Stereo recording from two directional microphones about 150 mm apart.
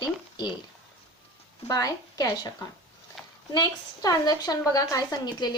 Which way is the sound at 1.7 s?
25° left (ahead or behind).